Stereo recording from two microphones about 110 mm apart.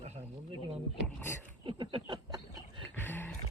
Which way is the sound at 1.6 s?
45° right (ahead or behind).